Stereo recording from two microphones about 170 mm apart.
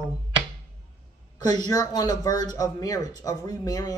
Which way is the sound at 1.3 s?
20° left (ahead or behind).